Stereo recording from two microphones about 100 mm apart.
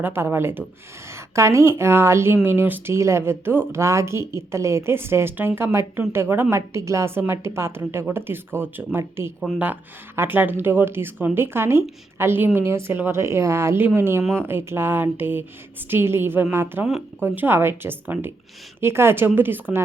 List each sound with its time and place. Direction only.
0.0 s speech: 20° right (ahead or behind)
16.8 s speech: 5° right (ahead or behind)
17.2 s speech: 20° right (ahead or behind)